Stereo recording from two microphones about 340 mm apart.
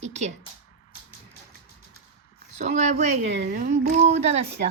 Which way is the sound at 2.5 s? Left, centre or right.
Right.